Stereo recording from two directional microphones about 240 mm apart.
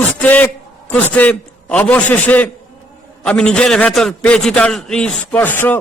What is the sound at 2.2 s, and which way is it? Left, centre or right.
A man's voice, centre.